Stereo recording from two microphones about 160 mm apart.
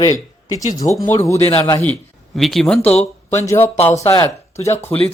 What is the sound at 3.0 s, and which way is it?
Speech, 20° left (ahead or behind).